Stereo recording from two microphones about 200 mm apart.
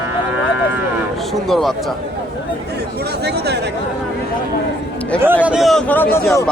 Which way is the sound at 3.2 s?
55° right (ahead or behind).